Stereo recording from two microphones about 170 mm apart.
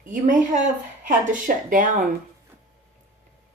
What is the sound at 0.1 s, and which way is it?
Speech, 50° right (ahead or behind).